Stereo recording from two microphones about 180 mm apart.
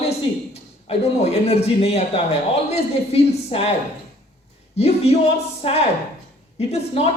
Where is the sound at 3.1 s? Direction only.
35° left (ahead or behind).